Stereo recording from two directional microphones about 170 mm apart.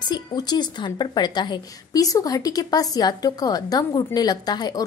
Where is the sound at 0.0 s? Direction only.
25° left (ahead or behind).